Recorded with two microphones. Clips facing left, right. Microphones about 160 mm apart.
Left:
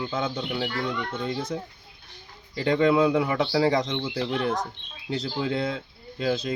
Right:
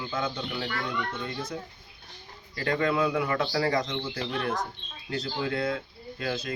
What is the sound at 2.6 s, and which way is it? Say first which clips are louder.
Speech: left 6 dB; 20° left (ahead or behind).